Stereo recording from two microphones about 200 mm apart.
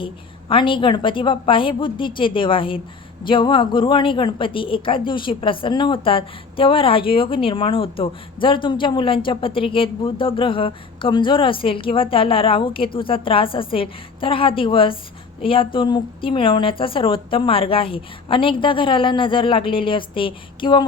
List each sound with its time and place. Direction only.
0.0 s a woman's voice: 25° left (ahead or behind)